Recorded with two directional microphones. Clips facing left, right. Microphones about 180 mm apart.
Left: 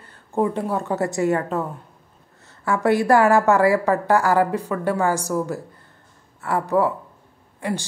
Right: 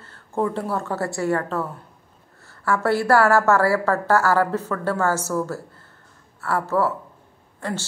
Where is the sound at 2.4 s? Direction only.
15° left (ahead or behind).